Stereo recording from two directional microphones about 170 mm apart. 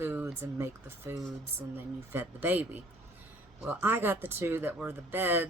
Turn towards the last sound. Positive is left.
turn(degrees=-10)  # may be behind; listen again after turning